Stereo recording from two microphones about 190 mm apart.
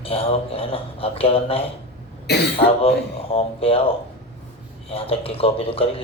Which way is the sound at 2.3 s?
60° left (ahead or behind).